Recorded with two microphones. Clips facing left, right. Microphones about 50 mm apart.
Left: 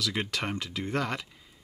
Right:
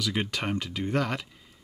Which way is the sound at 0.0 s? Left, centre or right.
Centre.